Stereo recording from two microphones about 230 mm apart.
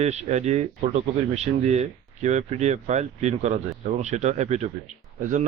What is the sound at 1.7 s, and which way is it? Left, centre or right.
Speech, right.